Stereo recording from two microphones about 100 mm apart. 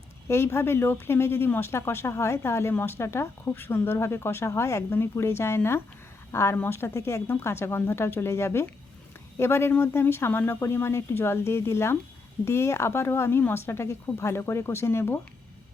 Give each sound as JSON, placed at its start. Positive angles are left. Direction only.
{"t": 0.3, "sound": "speech", "side_deg": 25}